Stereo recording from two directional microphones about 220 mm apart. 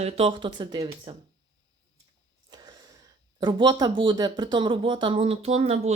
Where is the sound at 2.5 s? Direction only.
15° right (ahead or behind).